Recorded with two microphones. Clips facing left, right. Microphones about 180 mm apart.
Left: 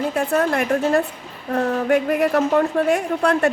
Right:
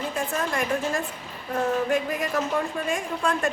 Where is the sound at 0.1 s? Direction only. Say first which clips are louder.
Left 8 dB; 65° left (ahead or behind).